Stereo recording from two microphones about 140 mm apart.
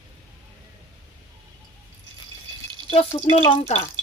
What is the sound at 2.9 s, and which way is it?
Speech, 45° left (ahead or behind).